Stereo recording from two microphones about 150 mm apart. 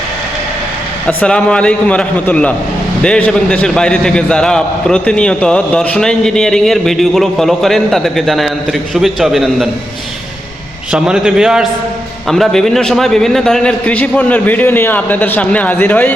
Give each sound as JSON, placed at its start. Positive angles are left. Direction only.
{"t": 1.0, "sound": "a man's voice", "side_deg": 5}
{"t": 10.9, "sound": "a man's voice", "side_deg": -5}